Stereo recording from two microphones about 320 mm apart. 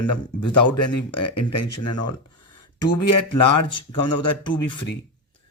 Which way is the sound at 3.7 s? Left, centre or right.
Centre.